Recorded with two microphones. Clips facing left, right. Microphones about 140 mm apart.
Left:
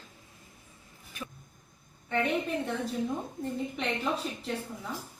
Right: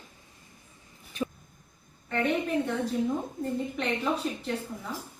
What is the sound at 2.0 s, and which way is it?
A woman's voice, centre (ahead or behind).